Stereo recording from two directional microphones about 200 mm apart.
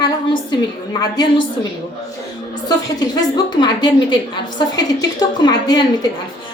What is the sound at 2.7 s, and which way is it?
A woman's voice, 20° left (ahead or behind).